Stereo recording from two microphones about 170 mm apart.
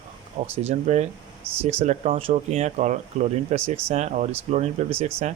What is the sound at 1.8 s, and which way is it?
Speech, 40° right (ahead or behind).